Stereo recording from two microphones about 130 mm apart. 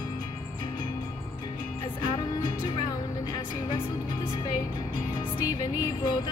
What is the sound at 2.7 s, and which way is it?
Music, 35° left (ahead or behind).